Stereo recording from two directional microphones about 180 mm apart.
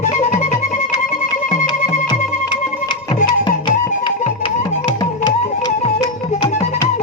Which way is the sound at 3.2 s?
25° left (ahead or behind).